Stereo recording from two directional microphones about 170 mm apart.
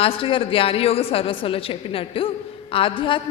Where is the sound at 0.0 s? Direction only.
30° left (ahead or behind).